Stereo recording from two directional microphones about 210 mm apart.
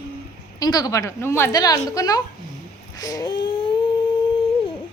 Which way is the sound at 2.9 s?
15° left (ahead or behind).